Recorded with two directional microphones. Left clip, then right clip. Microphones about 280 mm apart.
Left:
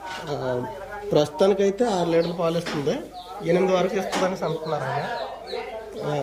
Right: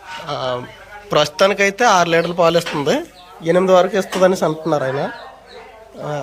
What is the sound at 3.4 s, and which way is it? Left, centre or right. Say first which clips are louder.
Speech: right 8 dB; centre.